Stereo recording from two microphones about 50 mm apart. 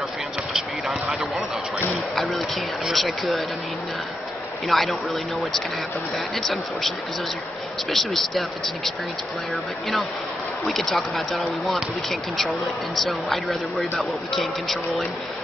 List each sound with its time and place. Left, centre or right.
0.6 s basketball bounce: centre
2.1 s a sound: centre
2.9 s speech: centre
4.6 s speech: centre
7.9 s speech: centre
10.7 s speech: centre